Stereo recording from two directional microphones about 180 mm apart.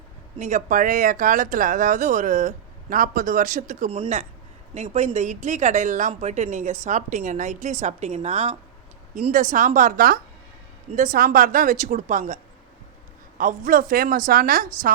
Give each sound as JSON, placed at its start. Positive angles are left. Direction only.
{"t": 0.3, "sound": "speech", "side_deg": -40}
{"t": 3.9, "sound": "a woman's voice", "side_deg": -35}
{"t": 13.7, "sound": "speech", "side_deg": -50}